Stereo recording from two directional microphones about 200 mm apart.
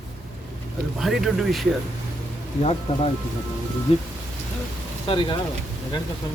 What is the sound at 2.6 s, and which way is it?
Speech, 30° left (ahead or behind).